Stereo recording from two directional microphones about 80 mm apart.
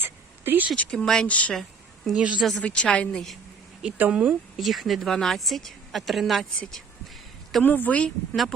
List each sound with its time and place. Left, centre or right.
0.0 s a sound: right
0.9 s a woman's voice: centre
1.3 s a woman's voice: centre
2.1 s speech: centre
2.6 s a woman's voice: centre
3.8 s speech: centre
4.3 s speech: centre
7.6 s speech: left